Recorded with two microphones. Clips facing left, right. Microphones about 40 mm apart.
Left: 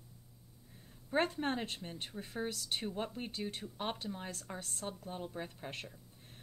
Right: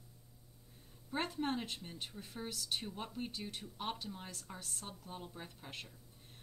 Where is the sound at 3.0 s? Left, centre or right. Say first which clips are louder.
Left 3 dB; left.